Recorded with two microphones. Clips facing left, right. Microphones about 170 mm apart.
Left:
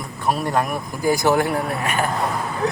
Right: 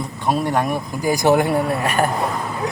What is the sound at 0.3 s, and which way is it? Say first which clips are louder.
Speech: right 2 dB; 20° right (ahead or behind).